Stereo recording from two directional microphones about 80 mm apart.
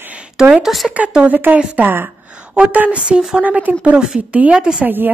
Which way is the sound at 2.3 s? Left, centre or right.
Centre.